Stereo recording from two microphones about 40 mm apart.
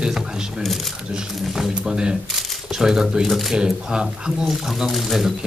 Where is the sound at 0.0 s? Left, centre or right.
Centre.